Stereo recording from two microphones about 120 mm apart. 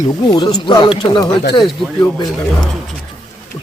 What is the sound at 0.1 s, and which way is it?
Speech, 35° left (ahead or behind).